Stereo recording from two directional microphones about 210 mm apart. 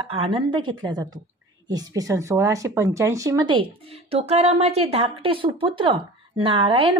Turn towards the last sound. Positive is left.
turn(degrees=-25)  # may be behind; listen again after turning